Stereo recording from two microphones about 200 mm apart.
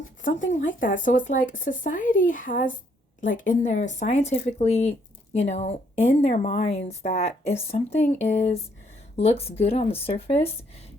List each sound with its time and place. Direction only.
0.2 s speech: 40° left (ahead or behind)